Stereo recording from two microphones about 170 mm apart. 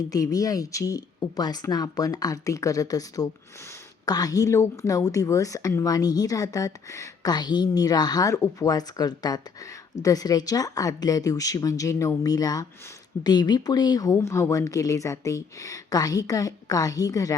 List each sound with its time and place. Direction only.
0.1 s a woman's voice: 20° left (ahead or behind)